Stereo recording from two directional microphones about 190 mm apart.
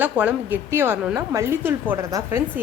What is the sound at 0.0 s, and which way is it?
A woman's voice, 10° right (ahead or behind).